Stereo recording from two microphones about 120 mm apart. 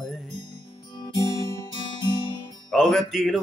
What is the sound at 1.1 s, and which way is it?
Music, 30° left (ahead or behind).